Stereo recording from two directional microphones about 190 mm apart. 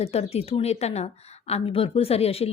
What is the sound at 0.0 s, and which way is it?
A woman's voice, 30° left (ahead or behind).